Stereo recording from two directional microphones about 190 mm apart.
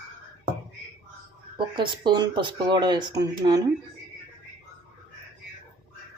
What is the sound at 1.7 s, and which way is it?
Speech, 25° right (ahead or behind).